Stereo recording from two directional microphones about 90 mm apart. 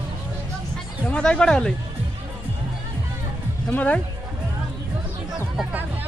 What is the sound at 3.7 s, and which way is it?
Speech, 15° left (ahead or behind).